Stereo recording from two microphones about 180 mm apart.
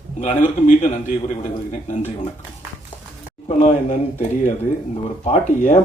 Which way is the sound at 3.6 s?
40° left (ahead or behind).